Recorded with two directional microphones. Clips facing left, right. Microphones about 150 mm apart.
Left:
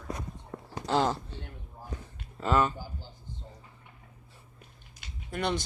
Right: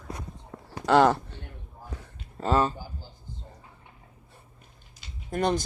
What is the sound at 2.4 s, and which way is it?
Speech, 35° right (ahead or behind).